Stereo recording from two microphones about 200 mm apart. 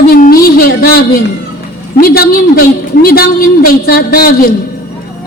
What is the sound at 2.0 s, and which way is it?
A woman's voice, 45° left (ahead or behind).